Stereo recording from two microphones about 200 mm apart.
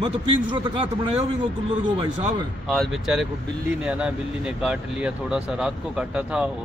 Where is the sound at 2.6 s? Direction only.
Centre (ahead or behind).